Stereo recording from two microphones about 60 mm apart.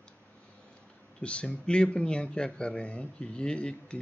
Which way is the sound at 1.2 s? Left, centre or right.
Centre.